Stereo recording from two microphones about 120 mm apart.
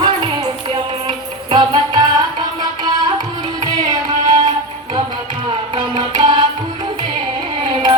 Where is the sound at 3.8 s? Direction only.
35° right (ahead or behind).